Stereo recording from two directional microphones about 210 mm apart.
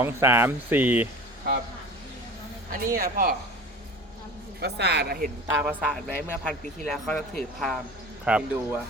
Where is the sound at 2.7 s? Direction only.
45° right (ahead or behind).